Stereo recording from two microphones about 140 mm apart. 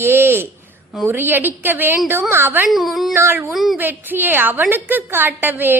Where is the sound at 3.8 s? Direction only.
15° right (ahead or behind).